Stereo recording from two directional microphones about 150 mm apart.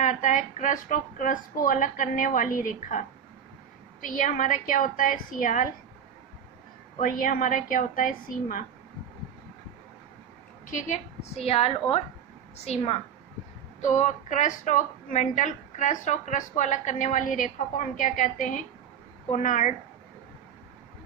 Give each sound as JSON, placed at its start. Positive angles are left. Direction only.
{"t": 0.0, "sound": "a woman's voice", "side_deg": 60}
{"t": 4.0, "sound": "a woman's voice", "side_deg": 60}
{"t": 7.0, "sound": "a woman's voice", "side_deg": 65}
{"t": 10.7, "sound": "a woman's voice", "side_deg": 55}
{"t": 13.8, "sound": "a woman's voice", "side_deg": 55}